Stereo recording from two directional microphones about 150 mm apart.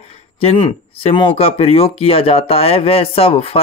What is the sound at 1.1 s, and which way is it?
Speech, 40° left (ahead or behind).